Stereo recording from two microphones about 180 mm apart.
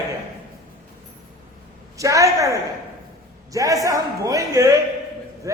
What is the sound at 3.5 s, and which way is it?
A man's voice, 20° right (ahead or behind).